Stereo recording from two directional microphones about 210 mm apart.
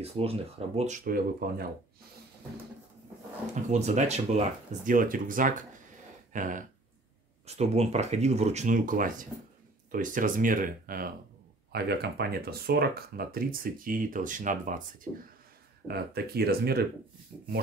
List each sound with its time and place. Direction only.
0.0 s speech: 30° right (ahead or behind); by 1.7 s 45° right (ahead or behind)
3.7 s speech: 35° right (ahead or behind)
15.9 s speech: 50° right (ahead or behind)